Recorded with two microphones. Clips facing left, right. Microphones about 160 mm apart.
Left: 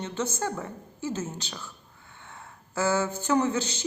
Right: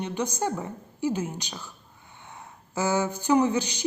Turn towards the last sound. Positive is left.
turn(degrees=-15)  # may be behind; listen again after turning